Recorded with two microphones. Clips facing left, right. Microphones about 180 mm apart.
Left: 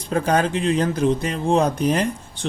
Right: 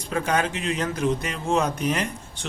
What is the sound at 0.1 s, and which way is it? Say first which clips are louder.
Speech: left 5 dB; 35° left (ahead or behind).